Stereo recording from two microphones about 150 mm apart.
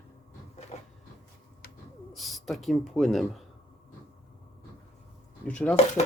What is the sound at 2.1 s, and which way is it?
Speech, centre (ahead or behind).